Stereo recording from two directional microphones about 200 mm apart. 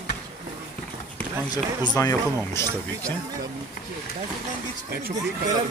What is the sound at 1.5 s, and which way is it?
Speech, 20° left (ahead or behind).